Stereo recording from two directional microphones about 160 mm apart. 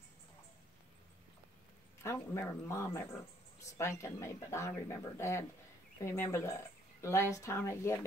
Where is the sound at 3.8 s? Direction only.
15° left (ahead or behind).